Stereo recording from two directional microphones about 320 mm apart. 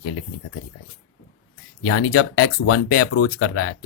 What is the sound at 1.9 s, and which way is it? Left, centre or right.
Speech, left.